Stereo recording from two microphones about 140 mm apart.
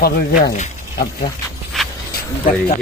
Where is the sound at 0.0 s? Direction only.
85° left.